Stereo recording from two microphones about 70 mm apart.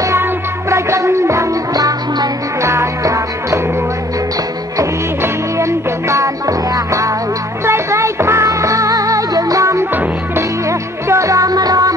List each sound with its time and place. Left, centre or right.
0.0 s music: right
2.6 s music: right
5.2 s music: right